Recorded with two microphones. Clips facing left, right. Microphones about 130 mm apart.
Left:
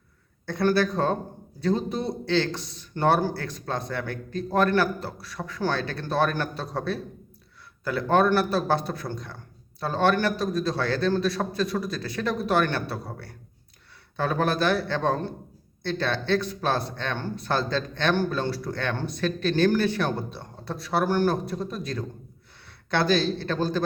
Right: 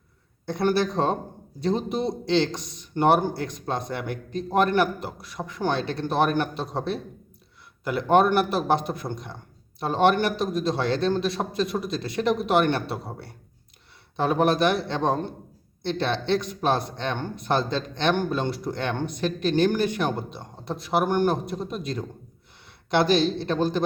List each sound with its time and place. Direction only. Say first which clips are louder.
0.4 s speech: even; 20° right (ahead or behind)